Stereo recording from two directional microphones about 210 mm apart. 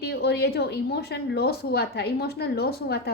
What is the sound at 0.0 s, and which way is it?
A woman's voice, 50° left (ahead or behind).